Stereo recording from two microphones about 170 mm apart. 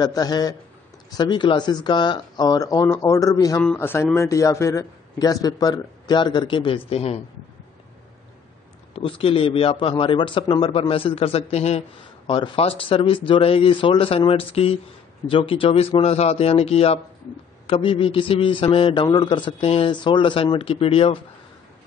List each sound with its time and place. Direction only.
0.0 s a man's voice: 25° left (ahead or behind)
8.9 s a man's voice: 30° left (ahead or behind)